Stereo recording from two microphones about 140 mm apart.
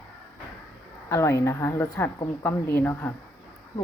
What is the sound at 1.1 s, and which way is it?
Speech, 20° left (ahead or behind).